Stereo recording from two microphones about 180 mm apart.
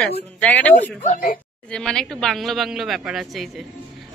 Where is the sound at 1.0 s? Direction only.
45° left (ahead or behind).